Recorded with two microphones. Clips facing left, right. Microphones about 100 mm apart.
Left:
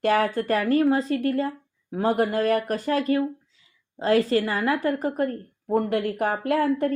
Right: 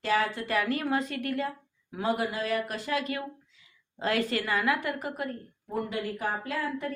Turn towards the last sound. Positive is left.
turn(degrees=55)  # may be behind; listen again after turning